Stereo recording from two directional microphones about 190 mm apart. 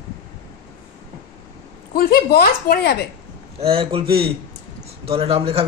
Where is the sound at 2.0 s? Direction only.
50° left (ahead or behind).